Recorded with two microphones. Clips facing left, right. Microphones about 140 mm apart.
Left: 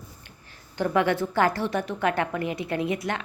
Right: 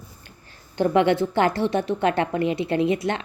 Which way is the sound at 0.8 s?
25° right (ahead or behind).